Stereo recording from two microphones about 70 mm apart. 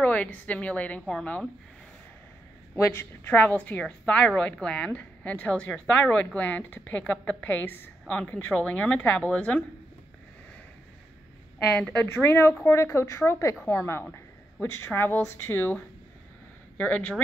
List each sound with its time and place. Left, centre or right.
0.0 s a woman's voice: left
2.7 s a woman's voice: left
11.9 s a woman's voice: left
12.3 s a woman's voice: left; by 17.2 s centre